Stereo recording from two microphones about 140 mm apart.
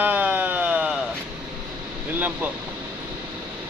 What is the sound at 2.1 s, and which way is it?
Speech, 15° right (ahead or behind).